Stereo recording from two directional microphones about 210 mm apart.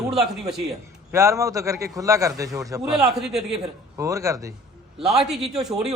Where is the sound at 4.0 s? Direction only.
15° right (ahead or behind).